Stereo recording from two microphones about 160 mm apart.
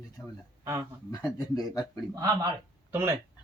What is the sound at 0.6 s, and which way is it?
Speech, 20° right (ahead or behind).